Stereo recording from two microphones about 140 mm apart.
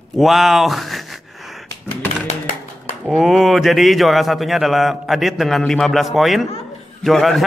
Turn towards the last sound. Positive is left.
turn(degrees=0)  # may be behind; listen again after turning